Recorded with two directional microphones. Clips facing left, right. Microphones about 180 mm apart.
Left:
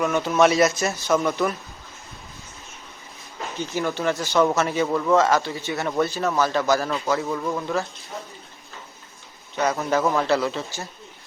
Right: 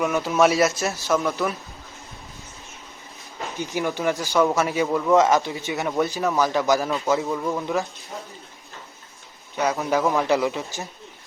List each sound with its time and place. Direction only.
0.0 s speech: 5° right (ahead or behind)
3.6 s speech: 15° right (ahead or behind)
5.1 s speech: 15° right (ahead or behind)
9.6 s speech: 5° right (ahead or behind)
10.2 s speech: 15° right (ahead or behind)